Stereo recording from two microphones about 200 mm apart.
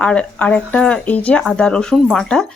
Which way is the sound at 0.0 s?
5° left (ahead or behind).